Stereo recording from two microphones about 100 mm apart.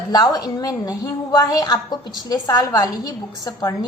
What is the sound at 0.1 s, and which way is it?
A woman's voice, 40° left (ahead or behind).